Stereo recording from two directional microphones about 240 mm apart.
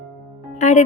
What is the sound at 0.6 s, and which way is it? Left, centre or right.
Speech, left.